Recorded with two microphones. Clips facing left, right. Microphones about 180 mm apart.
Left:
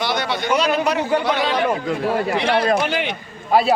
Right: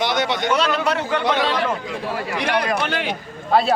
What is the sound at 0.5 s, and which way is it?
Speech, 10° left (ahead or behind).